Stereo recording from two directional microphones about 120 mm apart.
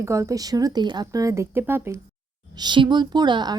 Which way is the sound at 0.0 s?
25° right (ahead or behind).